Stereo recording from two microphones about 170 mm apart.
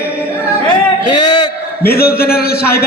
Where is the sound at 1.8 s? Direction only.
65° left (ahead or behind).